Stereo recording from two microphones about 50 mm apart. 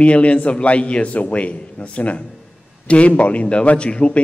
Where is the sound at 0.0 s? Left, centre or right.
Left.